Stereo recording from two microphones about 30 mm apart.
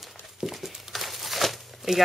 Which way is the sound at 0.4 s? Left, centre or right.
Centre.